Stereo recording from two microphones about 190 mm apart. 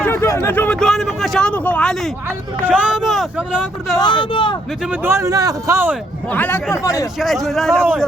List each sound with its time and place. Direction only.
0.0 s speech: 15° left (ahead or behind); by 3.9 s 5° right (ahead or behind)
3.9 s speech: 25° left (ahead or behind)
4.8 s speech: 10° right (ahead or behind)
6.2 s speech: 10° left (ahead or behind)
7.2 s speech: centre (ahead or behind)